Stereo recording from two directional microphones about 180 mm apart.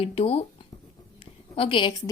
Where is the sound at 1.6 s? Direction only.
30° left (ahead or behind).